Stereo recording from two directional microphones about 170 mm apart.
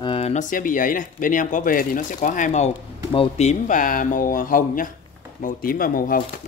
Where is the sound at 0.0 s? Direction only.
35° left (ahead or behind).